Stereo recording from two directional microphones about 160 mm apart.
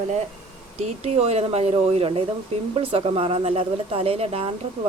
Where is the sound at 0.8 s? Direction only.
45° right (ahead or behind).